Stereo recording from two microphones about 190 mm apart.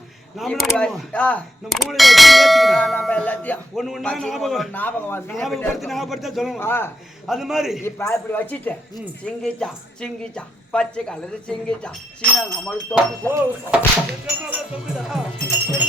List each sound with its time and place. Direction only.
0.3 s speech: centre (ahead or behind)
6.6 s speech: 10° left (ahead or behind)
7.3 s speech: centre (ahead or behind)
7.9 s speech: 15° left (ahead or behind)
13.3 s speech: 5° right (ahead or behind)